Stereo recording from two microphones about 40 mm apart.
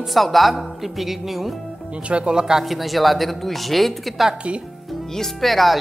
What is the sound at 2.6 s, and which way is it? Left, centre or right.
Speech, centre.